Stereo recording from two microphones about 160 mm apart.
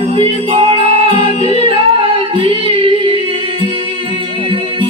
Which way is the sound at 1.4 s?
45° left (ahead or behind).